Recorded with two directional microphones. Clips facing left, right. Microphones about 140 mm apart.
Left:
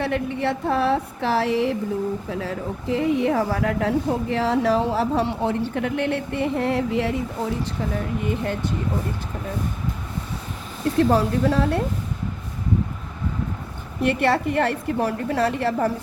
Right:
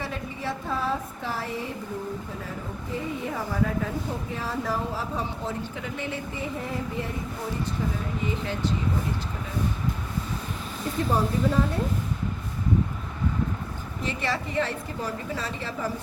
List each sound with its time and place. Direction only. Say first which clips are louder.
0.0 s speech: left 9 dB; 65° left (ahead or behind); by 1.7 s 90° left
2.3 s speech: left 8 dB; 75° left (ahead or behind)
8.2 s a woman's voice: left 4 dB; 55° left (ahead or behind)
10.9 s speech: left 6 dB; 85° left
14.0 s a woman's voice: left 10 dB; 60° left (ahead or behind)